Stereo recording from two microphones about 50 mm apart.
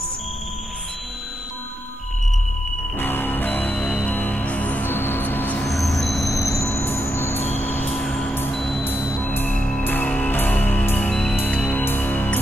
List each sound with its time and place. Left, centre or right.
3.0 s music: left
4.8 s music: left
5.6 s vehicle: centre
6.7 s music: left
8.0 s music: centre
8.8 s music: left
9.5 s music: left
9.8 s music: left